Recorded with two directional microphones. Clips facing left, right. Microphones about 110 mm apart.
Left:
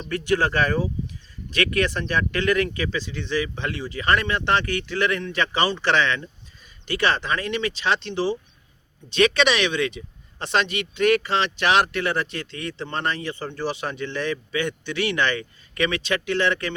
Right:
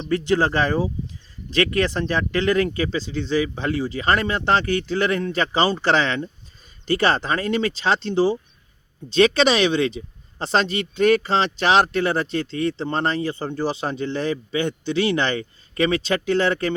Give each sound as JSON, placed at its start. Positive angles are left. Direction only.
{"t": 0.0, "sound": "a man's voice", "side_deg": -25}